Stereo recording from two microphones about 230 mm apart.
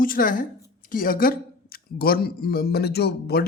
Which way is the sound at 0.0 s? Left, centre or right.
Left.